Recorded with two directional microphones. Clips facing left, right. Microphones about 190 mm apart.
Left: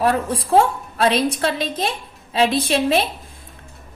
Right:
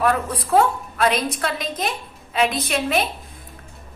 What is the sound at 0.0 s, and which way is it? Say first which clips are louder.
A woman's voice: left 2 dB; 30° left (ahead or behind).